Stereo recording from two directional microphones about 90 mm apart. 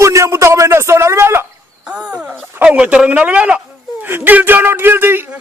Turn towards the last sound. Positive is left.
turn(degrees=-25)  # may be behind; listen again after turning